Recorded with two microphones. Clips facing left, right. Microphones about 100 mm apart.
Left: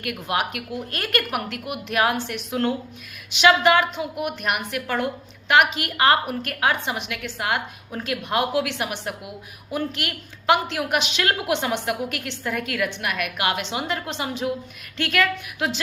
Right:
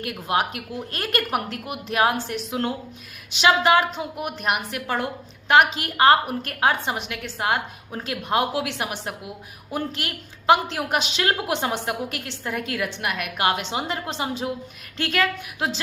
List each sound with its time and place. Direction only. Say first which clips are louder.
0.0 s a woman's voice: right 1 dB; 30° right (ahead or behind)